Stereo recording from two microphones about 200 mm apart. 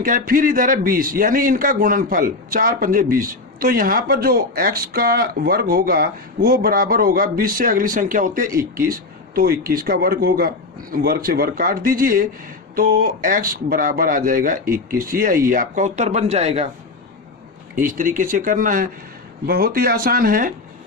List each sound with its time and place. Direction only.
0.0 s a man's voice: 45° right (ahead or behind)
17.8 s a man's voice: 40° right (ahead or behind)